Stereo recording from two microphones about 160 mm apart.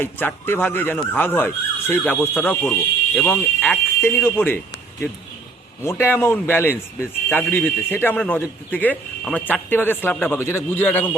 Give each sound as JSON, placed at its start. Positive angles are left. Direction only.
{"t": 0.0, "sound": "a man's voice", "side_deg": 10}
{"t": 5.8, "sound": "a man's voice", "side_deg": 15}